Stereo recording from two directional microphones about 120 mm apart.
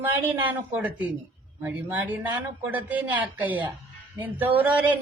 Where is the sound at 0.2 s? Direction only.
15° right (ahead or behind).